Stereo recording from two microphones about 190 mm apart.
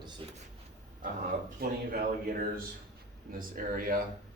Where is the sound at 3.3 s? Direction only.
50° right (ahead or behind).